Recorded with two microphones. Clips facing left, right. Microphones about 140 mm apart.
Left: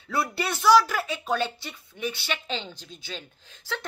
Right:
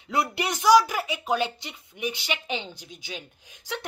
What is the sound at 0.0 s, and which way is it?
A woman's voice, 20° right (ahead or behind).